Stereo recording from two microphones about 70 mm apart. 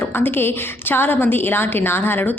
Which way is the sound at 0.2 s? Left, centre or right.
Left.